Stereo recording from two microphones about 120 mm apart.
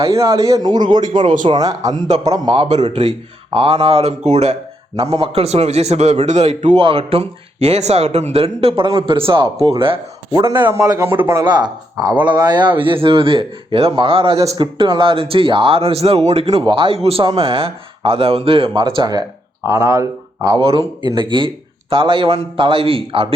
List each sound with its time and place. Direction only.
0.0 s a man's voice: 30° right (ahead or behind)
3.5 s speech: 50° right (ahead or behind)
4.3 s a man's voice: 65° right (ahead or behind)
6.7 s a man's voice: 50° right (ahead or behind)
10.7 s speech: 25° right (ahead or behind)
11.4 s a man's voice: 35° right (ahead or behind)
19.6 s speech: 25° right (ahead or behind)
20.6 s speech: 50° right (ahead or behind)